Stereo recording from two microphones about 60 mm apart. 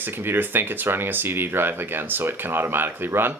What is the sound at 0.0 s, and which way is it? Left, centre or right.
Speech, right.